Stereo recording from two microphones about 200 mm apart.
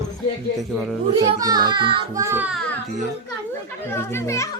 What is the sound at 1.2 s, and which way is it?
A child's voice, 20° right (ahead or behind).